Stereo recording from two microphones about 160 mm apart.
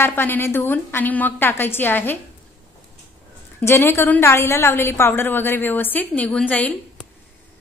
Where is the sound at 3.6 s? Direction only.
15° left (ahead or behind).